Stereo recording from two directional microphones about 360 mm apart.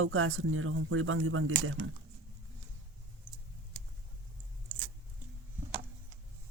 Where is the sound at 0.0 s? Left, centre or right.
Right.